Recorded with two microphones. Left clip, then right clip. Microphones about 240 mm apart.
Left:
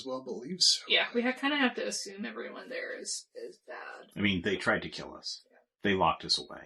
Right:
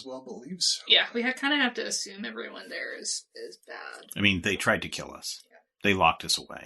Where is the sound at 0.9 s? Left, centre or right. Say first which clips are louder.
Right 5 dB; right.